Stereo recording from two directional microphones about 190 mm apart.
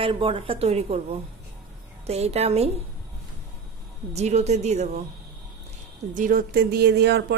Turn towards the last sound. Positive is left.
turn(degrees=-65)  # may be behind; listen again after turning